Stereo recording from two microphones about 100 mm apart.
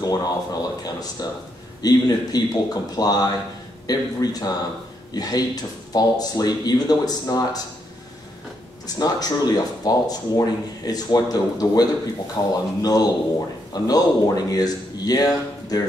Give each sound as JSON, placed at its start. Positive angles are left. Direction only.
{"t": 0.0, "sound": "speech", "side_deg": 40}
{"t": 8.8, "sound": "speech", "side_deg": 40}